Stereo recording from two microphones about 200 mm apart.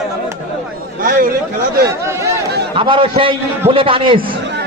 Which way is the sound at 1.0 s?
45° right (ahead or behind).